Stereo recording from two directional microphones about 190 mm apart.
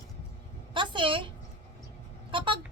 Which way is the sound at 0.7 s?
25° right (ahead or behind).